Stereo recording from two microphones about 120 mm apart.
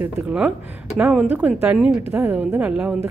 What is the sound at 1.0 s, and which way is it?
A woman's voice, 10° right (ahead or behind).